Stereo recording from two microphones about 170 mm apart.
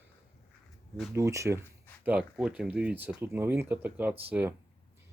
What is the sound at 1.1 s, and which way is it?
Speech, 15° right (ahead or behind).